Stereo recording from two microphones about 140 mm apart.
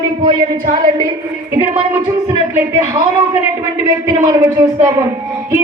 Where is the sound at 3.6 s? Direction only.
25° right (ahead or behind).